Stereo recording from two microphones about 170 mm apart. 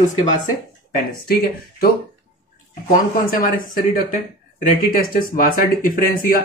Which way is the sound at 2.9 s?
55° left (ahead or behind).